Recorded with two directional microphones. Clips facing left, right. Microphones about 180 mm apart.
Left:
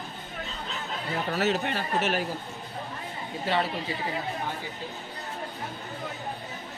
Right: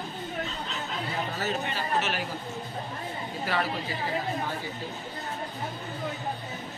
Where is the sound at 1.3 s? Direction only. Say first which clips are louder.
Left 4 dB; 75° left (ahead or behind); by 2.2 s 50° left (ahead or behind).